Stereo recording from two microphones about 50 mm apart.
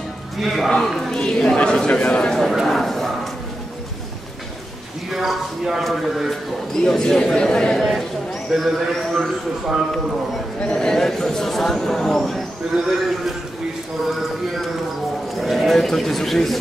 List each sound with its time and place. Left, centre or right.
0.4 s speech: centre
0.9 s speech: centre
2.3 s speech: centre
5.1 s speech: centre
6.7 s speech: centre
8.5 s speech: centre
10.6 s speech: centre
12.7 s a man's voice: centre
15.3 s speech: centre